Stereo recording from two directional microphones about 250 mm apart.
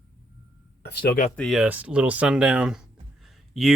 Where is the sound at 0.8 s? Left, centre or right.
Left.